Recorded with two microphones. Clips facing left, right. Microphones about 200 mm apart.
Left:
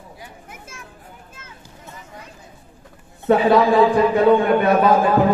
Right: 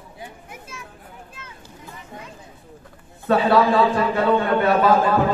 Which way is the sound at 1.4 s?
45° left (ahead or behind).